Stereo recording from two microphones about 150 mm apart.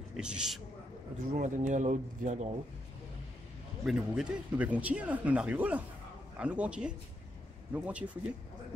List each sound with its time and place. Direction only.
0.1 s speech: 5° right (ahead or behind)
1.3 s speech: 60° right (ahead or behind)
3.8 s speech: 5° right (ahead or behind)